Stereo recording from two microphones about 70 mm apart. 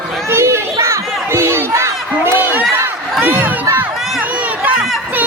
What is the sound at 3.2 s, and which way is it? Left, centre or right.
Crowd, right.